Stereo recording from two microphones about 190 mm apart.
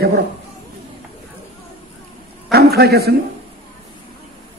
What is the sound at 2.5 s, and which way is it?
Speech, 55° right (ahead or behind).